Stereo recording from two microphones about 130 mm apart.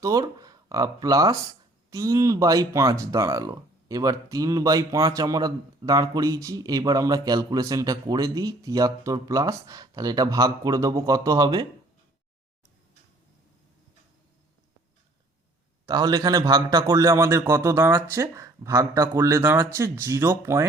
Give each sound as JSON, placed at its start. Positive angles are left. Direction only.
{"t": 0.0, "sound": "speech", "side_deg": -25}
{"t": 15.9, "sound": "speech", "side_deg": -25}